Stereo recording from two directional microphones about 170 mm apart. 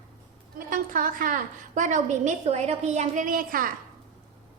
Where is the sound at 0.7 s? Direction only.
55° right (ahead or behind).